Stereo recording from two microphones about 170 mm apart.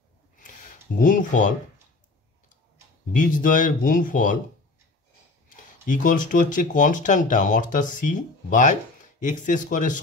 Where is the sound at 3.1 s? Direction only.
50° left (ahead or behind).